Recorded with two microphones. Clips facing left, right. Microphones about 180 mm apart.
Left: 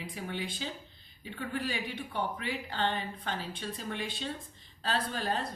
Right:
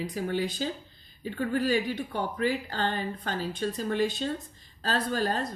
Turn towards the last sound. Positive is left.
turn(degrees=-40)  # may be behind; listen again after turning